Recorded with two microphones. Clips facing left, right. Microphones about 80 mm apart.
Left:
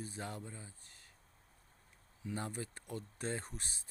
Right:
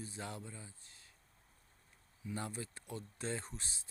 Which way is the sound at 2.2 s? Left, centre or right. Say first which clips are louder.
Left 1 dB; left.